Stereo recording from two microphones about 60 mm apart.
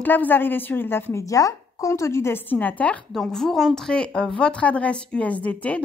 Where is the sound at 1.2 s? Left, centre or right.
Left.